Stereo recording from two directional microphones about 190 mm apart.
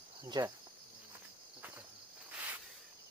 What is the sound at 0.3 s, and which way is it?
Speech, 20° right (ahead or behind).